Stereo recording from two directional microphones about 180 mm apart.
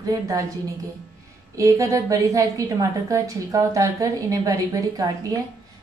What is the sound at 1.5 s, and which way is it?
A woman's voice, 15° right (ahead or behind).